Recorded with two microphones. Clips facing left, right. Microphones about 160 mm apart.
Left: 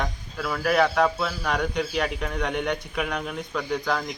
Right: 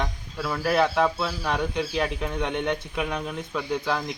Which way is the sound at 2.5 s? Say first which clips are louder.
Even; 30° right (ahead or behind).